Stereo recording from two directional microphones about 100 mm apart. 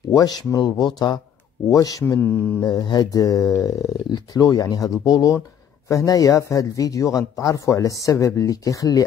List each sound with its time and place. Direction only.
0.1 s speech: 40° left (ahead or behind)